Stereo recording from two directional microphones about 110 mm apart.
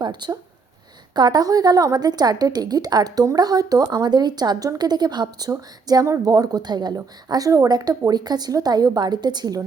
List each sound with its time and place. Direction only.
0.0 s speech: 45° right (ahead or behind)